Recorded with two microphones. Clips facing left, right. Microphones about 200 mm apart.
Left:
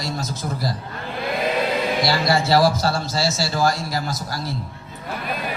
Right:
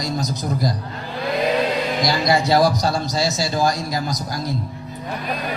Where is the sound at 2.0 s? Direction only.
20° right (ahead or behind).